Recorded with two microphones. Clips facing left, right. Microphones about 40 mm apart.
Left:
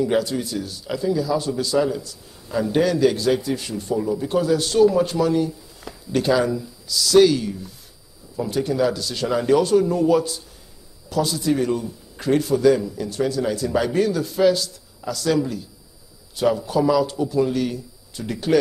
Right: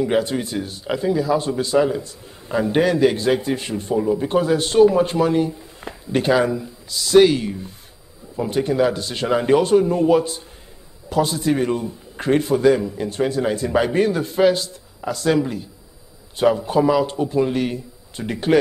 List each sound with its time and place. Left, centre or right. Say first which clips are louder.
0.0 s a man's voice: right 1 dB; right